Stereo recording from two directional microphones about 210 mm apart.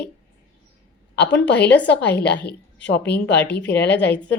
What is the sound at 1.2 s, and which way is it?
A woman's voice, 55° left (ahead or behind).